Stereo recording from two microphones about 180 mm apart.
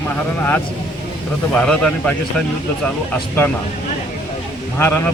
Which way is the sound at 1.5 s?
5° left (ahead or behind).